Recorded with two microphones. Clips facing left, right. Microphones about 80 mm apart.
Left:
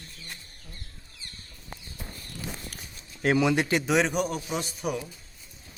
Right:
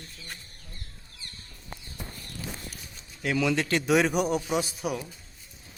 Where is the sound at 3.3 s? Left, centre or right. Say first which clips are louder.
Left 1 dB; centre.